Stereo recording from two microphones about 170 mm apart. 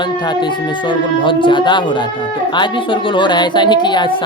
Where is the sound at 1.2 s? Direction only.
30° left (ahead or behind).